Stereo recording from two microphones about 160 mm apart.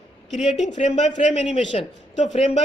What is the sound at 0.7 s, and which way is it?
A man's voice, 40° left (ahead or behind).